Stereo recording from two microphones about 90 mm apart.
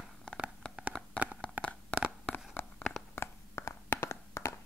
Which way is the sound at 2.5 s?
20° left (ahead or behind).